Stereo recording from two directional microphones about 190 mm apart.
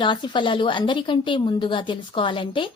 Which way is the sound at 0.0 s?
25° left (ahead or behind).